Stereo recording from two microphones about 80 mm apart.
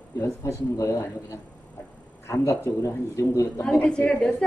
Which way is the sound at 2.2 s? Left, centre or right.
Left.